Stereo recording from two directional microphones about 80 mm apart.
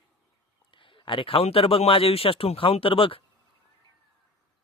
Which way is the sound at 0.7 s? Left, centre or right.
Left.